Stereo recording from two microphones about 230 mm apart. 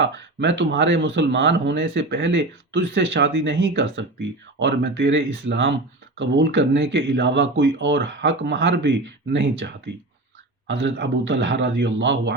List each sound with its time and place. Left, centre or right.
0.0 s speech: right